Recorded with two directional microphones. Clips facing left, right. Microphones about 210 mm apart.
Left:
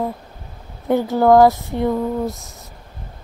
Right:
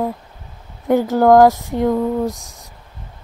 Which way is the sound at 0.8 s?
15° right (ahead or behind).